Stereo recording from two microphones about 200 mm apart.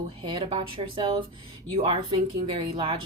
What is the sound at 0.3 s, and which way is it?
Speech, 25° right (ahead or behind).